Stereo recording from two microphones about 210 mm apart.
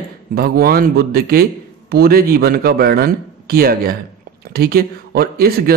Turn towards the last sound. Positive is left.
turn(degrees=-45)  # may be behind; listen again after turning